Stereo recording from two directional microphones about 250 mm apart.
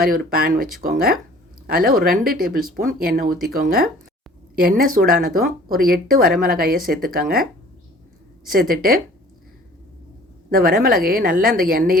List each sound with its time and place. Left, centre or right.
0.0 s speech: right
8.4 s speech: right
10.5 s speech: right